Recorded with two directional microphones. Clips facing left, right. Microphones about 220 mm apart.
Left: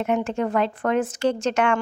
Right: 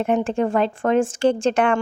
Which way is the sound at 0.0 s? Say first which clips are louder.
Right 3 dB; 30° right (ahead or behind).